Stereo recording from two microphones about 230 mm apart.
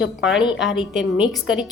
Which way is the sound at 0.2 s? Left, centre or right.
Centre.